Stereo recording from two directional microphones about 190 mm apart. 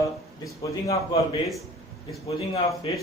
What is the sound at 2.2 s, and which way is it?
Speech, 30° left (ahead or behind).